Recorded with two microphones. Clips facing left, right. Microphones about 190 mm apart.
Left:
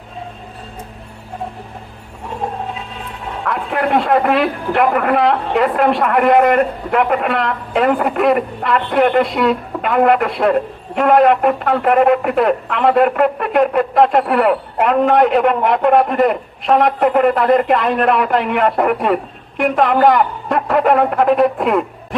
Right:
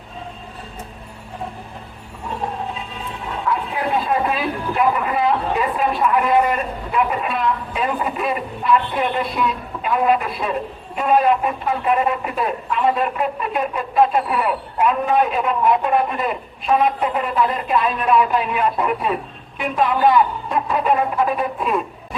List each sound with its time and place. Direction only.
3.4 s a man's voice: 70° left (ahead or behind)